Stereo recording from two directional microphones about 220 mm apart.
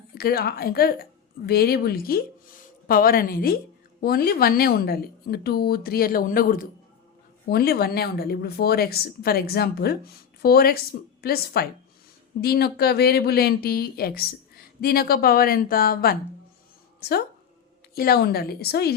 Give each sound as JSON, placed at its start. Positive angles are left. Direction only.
{"t": 0.1, "sound": "speech", "side_deg": 45}